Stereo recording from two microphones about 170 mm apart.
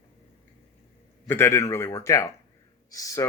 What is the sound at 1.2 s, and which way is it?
Speech, 15° left (ahead or behind).